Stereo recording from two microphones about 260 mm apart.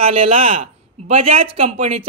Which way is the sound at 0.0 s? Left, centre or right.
Right.